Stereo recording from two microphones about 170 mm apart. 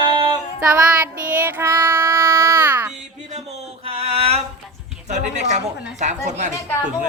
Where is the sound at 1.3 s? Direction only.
10° right (ahead or behind).